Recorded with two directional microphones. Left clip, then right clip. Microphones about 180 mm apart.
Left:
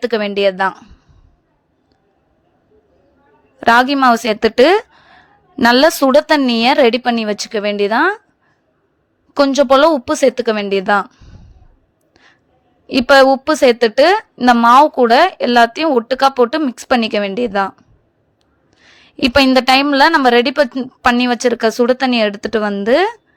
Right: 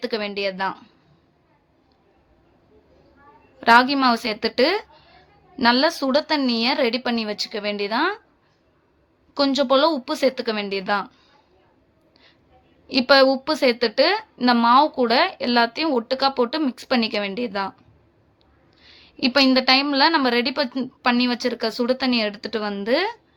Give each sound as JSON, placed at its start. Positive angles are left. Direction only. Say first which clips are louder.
{"t": 0.0, "sound": "a woman's voice", "louder": "left 10 dB", "side_deg": 45}
{"t": 0.7, "sound": "a man's voice", "louder": "left 4 dB", "side_deg": 35}
{"t": 3.6, "sound": "a woman's voice", "louder": "left 5 dB", "side_deg": 45}
{"t": 9.3, "sound": "a woman's voice", "louder": "left 8 dB", "side_deg": 45}
{"t": 12.9, "sound": "a woman's voice", "louder": "left 7 dB", "side_deg": 45}
{"t": 18.9, "sound": "a woman's voice", "louder": "left 7 dB", "side_deg": 45}